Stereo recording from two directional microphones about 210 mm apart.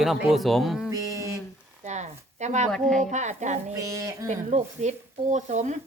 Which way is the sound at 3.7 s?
15° right (ahead or behind).